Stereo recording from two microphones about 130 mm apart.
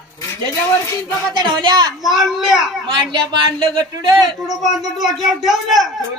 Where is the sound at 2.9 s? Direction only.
35° right (ahead or behind).